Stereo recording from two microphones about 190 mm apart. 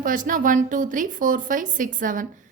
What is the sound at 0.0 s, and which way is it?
A woman's voice, 45° right (ahead or behind).